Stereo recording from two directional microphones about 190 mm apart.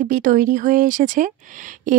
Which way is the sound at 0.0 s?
45° right (ahead or behind).